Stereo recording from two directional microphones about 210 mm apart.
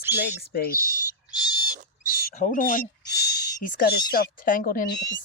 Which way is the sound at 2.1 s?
45° left (ahead or behind).